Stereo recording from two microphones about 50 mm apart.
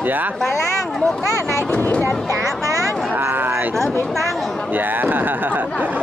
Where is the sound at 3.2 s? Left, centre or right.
Right.